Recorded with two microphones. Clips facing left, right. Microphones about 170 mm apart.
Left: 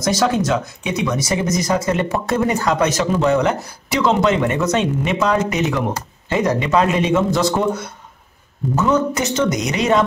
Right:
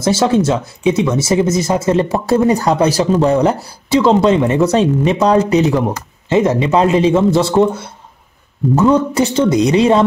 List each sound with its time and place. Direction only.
0.0 s speech: 25° right (ahead or behind)